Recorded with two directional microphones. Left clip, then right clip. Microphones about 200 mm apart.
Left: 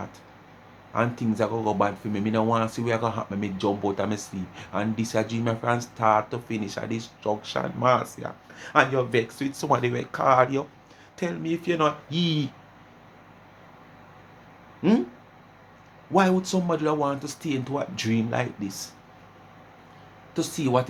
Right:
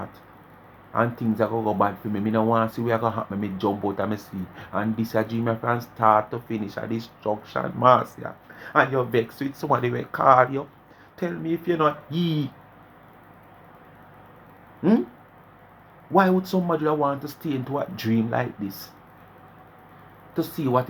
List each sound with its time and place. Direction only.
0.9 s speech: centre (ahead or behind)
6.9 s speech: 10° right (ahead or behind)
7.3 s speech: 5° left (ahead or behind)
7.8 s speech: 15° right (ahead or behind)
8.5 s speech: centre (ahead or behind)
9.5 s speech: 5° left (ahead or behind)
10.4 s speech: 15° left (ahead or behind)
11.2 s speech: centre (ahead or behind)
14.8 s speech: centre (ahead or behind)
16.1 s speech: 5° right (ahead or behind)
20.3 s speech: centre (ahead or behind)